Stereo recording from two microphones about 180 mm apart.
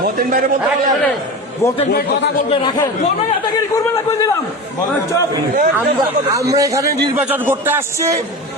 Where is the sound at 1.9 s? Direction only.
65° left (ahead or behind).